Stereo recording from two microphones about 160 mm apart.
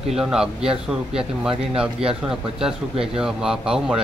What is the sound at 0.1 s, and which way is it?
Speech, 5° right (ahead or behind).